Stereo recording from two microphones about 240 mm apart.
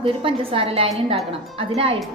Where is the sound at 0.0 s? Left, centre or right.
Right.